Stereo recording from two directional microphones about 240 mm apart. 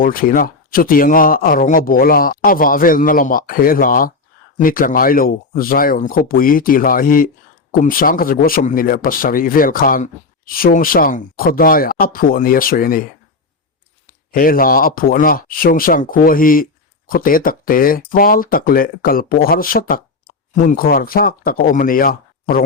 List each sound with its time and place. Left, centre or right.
0.0 s speech: left
14.1 s speech: left